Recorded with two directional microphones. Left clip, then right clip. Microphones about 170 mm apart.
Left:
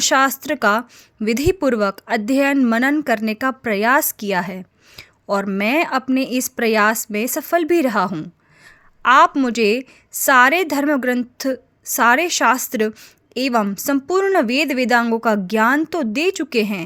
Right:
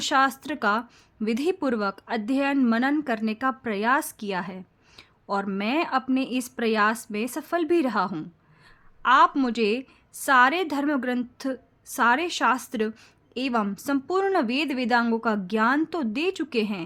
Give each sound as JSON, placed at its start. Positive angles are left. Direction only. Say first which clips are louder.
{"t": 0.0, "sound": "a woman's voice", "louder": "left 6 dB", "side_deg": 30}